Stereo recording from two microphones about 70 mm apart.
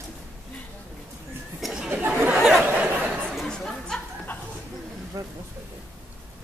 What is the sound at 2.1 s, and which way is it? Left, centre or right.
Chatter, centre.